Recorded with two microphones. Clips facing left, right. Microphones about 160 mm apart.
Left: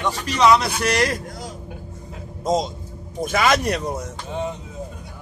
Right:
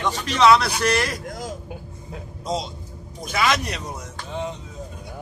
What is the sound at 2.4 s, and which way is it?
Speech, 45° left (ahead or behind).